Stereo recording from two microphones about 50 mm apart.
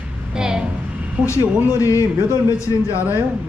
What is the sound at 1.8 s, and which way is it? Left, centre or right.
Speech, left.